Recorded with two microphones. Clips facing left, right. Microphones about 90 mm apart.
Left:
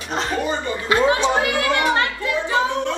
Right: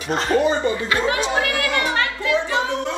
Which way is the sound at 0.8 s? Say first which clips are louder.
Left 4 dB; 20° left (ahead or behind).